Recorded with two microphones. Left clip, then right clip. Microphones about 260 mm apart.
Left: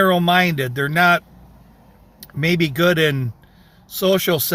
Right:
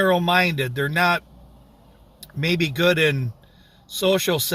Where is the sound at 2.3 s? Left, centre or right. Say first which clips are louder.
Left 4 dB; centre.